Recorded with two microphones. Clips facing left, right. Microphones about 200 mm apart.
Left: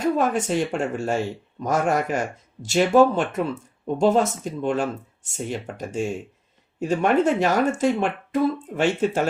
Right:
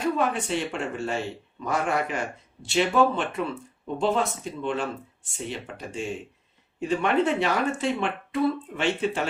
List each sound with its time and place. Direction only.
0.0 s speech: 45° left (ahead or behind)